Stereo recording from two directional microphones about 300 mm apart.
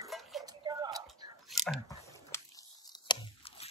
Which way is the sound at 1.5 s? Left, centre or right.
Centre.